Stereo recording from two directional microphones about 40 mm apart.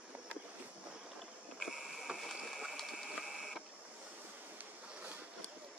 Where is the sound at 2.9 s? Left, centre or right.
Centre.